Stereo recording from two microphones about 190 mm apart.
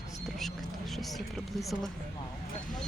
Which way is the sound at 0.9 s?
Centre (ahead or behind).